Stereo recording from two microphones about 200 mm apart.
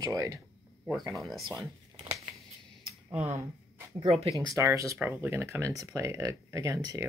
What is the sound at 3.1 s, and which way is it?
Speech, 10° right (ahead or behind).